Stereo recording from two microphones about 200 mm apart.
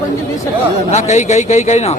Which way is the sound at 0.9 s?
35° left (ahead or behind).